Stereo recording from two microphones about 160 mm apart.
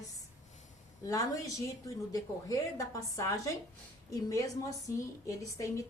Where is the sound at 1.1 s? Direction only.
20° left (ahead or behind).